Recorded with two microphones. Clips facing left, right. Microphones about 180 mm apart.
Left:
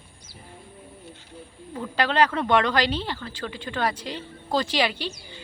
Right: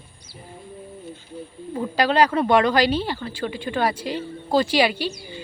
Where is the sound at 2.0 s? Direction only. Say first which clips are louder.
Right 3 dB; 10° right (ahead or behind).